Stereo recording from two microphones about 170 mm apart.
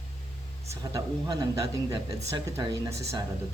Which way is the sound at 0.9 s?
20° right (ahead or behind).